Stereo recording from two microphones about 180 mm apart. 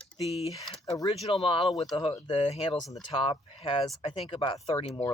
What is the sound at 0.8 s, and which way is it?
Speech, 20° left (ahead or behind).